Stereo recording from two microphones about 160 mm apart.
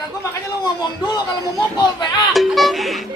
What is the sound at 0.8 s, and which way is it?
A man's voice, 25° left (ahead or behind).